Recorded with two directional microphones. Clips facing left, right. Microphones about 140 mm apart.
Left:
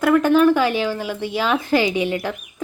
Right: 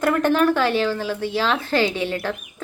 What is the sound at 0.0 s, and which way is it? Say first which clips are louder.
Speech: left 4 dB; 5° left (ahead or behind).